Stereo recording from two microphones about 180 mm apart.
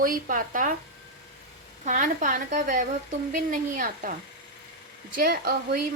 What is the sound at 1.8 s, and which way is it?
Speech, 45° right (ahead or behind).